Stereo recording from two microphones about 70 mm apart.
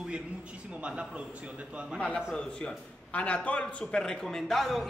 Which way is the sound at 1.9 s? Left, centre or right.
Centre.